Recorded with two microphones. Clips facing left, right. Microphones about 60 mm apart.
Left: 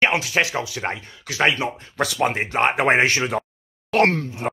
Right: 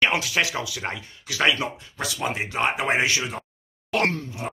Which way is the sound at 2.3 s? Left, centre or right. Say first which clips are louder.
Left 4 dB; left.